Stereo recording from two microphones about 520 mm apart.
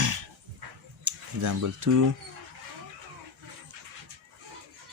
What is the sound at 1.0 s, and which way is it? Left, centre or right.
Speech, right.